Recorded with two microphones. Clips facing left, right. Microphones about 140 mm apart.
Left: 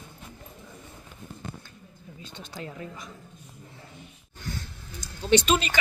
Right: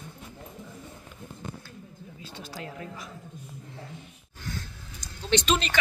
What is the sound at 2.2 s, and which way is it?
Speech, 5° right (ahead or behind).